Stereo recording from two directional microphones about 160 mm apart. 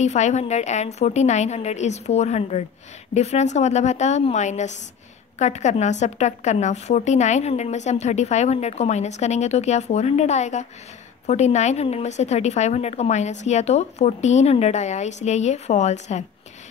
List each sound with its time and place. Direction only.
0.0 s a woman's voice: 45° left (ahead or behind)